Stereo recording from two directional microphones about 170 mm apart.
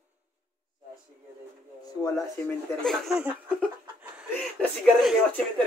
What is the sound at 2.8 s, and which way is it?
Speech, centre (ahead or behind).